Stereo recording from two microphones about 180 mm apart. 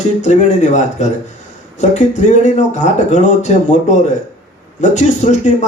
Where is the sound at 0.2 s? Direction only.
40° left (ahead or behind).